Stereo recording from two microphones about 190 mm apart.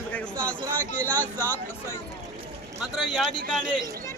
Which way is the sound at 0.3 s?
5° left (ahead or behind).